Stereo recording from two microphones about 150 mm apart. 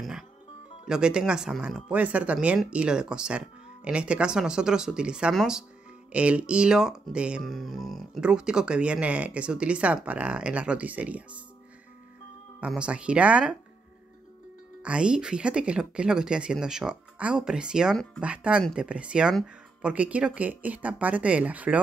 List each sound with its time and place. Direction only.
0.8 s speech: 5° right (ahead or behind)
12.5 s speech: 5° right (ahead or behind)
14.8 s speech: 5° right (ahead or behind)